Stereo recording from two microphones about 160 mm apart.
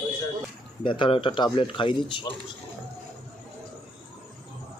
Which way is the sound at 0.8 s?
30° left (ahead or behind).